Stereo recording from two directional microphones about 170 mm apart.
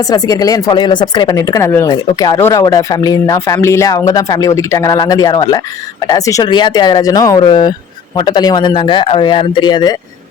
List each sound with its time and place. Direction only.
0.1 s speech: 20° left (ahead or behind)